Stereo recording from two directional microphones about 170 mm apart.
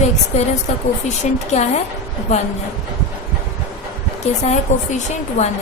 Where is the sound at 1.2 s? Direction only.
45° left (ahead or behind).